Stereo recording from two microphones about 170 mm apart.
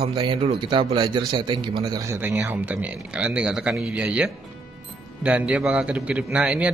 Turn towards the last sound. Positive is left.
turn(degrees=-5)  # may be behind; listen again after turning